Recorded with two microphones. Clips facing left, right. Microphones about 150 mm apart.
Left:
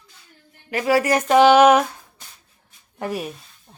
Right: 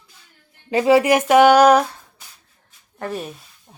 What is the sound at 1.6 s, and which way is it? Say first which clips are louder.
Female singing: right 1 dB; 5° left (ahead or behind).